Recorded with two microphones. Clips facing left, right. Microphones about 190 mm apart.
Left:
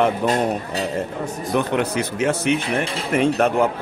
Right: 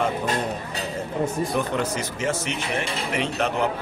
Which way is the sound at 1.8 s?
60° left (ahead or behind).